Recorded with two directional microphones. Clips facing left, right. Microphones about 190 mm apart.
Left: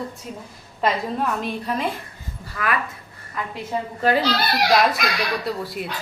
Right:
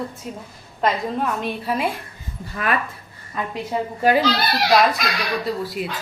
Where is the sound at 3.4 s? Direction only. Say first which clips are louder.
Right 3 dB; 25° right (ahead or behind).